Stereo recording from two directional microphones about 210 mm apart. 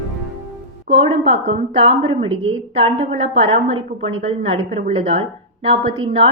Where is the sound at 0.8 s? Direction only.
30° right (ahead or behind).